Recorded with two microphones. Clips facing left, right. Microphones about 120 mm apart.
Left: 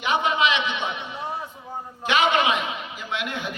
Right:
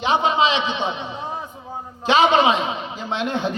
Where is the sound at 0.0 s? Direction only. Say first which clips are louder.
Right 4 dB; 25° right (ahead or behind).